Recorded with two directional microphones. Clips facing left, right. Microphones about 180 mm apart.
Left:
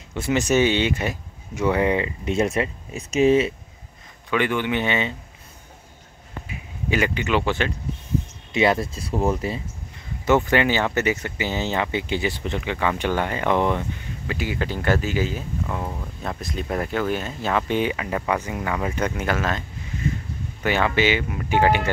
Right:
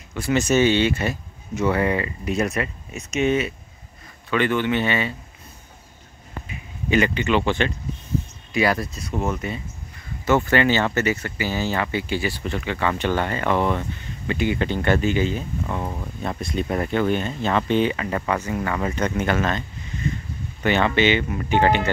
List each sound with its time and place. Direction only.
0.1 s speech: 20° left (ahead or behind)
4.3 s speech: 15° left (ahead or behind)
6.4 s speech: 5° left (ahead or behind)
8.5 s speech: 25° left (ahead or behind)
10.2 s speech: 15° left (ahead or behind)
14.2 s speech: 5° left (ahead or behind)
20.6 s speech: 5° left (ahead or behind)